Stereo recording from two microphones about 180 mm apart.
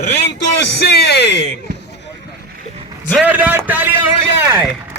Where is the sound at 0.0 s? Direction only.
70° left (ahead or behind).